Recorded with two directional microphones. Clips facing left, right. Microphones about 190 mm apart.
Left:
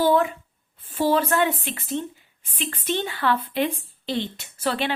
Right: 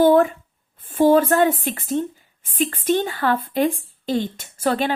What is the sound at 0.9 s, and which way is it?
Speech, 50° right (ahead or behind).